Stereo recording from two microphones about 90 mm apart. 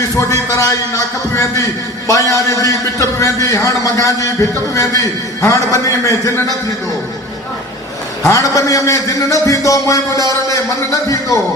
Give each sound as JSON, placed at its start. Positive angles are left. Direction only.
{"t": 0.0, "sound": "a man's voice", "side_deg": 40}
{"t": 8.3, "sound": "a man's voice", "side_deg": 35}